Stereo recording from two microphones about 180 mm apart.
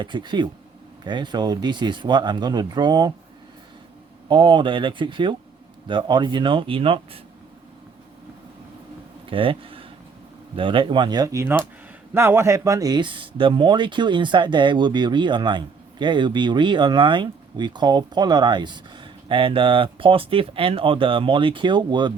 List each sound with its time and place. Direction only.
0.0 s speech: 25° right (ahead or behind)
4.3 s speech: 25° right (ahead or behind)
9.3 s speech: 30° right (ahead or behind)